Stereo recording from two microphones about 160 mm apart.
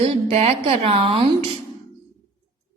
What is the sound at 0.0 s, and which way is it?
A woman's voice, 40° right (ahead or behind).